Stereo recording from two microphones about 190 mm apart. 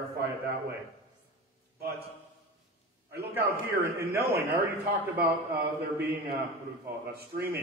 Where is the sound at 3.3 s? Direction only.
15° right (ahead or behind).